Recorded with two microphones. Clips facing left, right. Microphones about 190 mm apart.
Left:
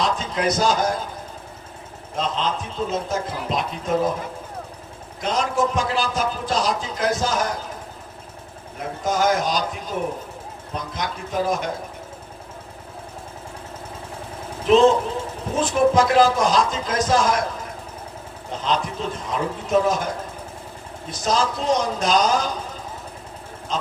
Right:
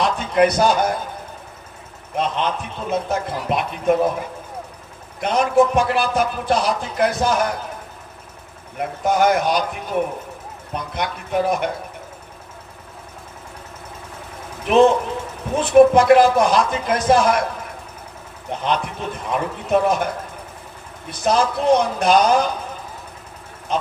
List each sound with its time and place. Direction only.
0.0 s a man's voice: 60° right (ahead or behind)
2.1 s a man's voice: 60° right (ahead or behind)
5.2 s a man's voice: 60° right (ahead or behind)
9.0 s a man's voice: 60° right (ahead or behind)
14.7 s a man's voice: 60° right (ahead or behind)
18.5 s a man's voice: 60° right (ahead or behind)
21.1 s a man's voice: 60° right (ahead or behind)
23.7 s honk: 60° right (ahead or behind)